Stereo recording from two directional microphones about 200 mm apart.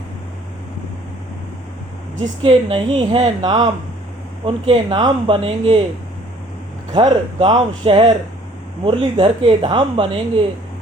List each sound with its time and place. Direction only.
2.4 s speech: 25° right (ahead or behind)
6.9 s speech: 25° right (ahead or behind)